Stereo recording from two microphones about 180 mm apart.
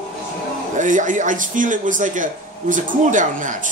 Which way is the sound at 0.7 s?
45° right (ahead or behind).